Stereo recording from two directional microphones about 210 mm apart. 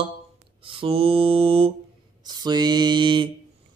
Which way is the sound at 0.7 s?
25° right (ahead or behind).